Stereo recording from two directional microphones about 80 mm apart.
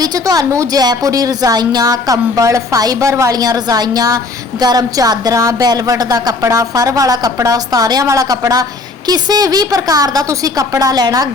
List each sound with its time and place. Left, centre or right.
0.0 s speech: right